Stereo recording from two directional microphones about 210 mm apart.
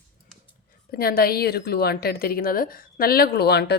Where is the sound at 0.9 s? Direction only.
45° left (ahead or behind).